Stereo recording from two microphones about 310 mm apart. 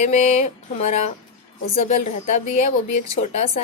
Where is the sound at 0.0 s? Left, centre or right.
Left.